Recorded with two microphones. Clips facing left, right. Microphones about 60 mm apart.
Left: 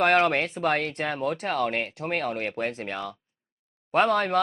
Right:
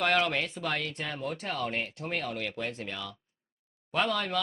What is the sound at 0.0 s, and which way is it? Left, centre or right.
Speech, left.